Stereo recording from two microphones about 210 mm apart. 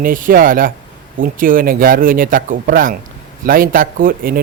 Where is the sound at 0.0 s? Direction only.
40° right (ahead or behind).